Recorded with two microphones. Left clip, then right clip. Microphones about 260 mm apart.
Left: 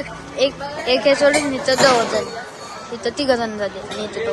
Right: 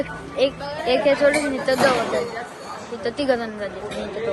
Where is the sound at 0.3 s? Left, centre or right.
Centre.